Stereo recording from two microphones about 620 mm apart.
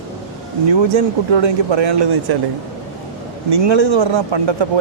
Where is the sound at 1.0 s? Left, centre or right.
Right.